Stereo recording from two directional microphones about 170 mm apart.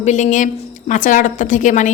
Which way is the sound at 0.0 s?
45° left (ahead or behind).